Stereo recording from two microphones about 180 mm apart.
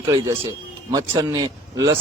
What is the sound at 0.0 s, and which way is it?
Speech, 20° right (ahead or behind).